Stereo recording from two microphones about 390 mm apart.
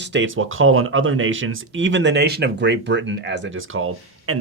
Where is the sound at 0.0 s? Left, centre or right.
Right.